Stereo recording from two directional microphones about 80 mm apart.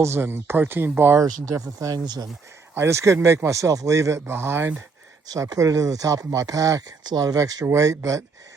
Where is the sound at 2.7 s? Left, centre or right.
Right.